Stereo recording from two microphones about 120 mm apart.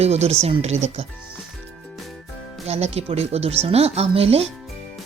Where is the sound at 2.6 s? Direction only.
60° right (ahead or behind).